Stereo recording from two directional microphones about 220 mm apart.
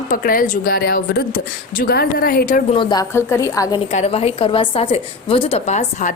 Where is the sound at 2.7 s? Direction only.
20° left (ahead or behind).